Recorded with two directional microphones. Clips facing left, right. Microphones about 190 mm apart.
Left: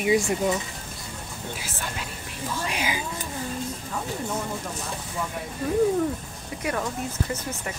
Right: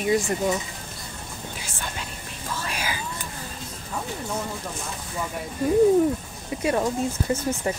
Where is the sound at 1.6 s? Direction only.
5° left (ahead or behind).